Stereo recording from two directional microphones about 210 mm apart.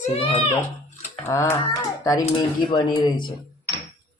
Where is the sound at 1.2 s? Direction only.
15° left (ahead or behind).